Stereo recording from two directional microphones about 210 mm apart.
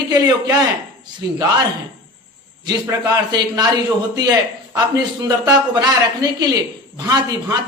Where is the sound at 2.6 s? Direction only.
20° right (ahead or behind).